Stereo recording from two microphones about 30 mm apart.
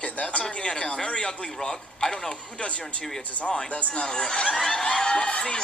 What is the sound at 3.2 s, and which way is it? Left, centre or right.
Speech, left.